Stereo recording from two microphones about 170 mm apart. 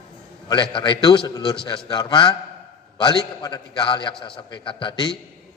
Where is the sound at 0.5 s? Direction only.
30° left (ahead or behind).